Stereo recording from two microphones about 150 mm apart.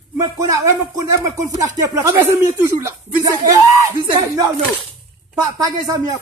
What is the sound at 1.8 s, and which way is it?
Speech, 20° right (ahead or behind).